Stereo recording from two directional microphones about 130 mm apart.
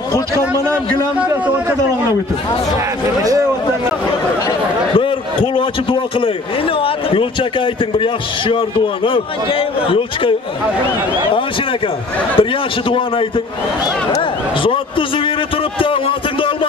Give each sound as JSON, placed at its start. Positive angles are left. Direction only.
{"t": 0.1, "sound": "a man's voice", "side_deg": 20}
{"t": 4.9, "sound": "a man's voice", "side_deg": 40}
{"t": 12.4, "sound": "a man's voice", "side_deg": 40}